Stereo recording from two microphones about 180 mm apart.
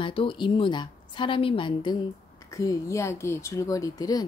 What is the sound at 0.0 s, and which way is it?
A woman's voice, 30° left (ahead or behind).